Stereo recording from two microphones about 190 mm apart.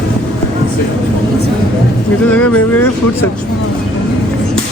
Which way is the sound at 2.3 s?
10° left (ahead or behind).